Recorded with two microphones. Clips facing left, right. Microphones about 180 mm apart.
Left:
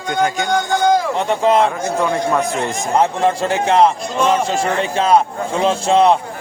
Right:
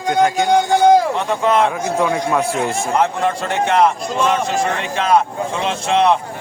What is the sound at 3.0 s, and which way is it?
A man's voice, 30° left (ahead or behind).